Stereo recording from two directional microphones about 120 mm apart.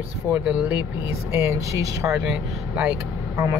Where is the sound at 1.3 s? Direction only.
20° right (ahead or behind).